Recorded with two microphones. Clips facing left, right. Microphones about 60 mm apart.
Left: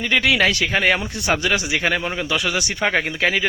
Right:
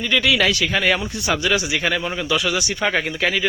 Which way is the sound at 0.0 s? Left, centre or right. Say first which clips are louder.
Left 1 dB; left.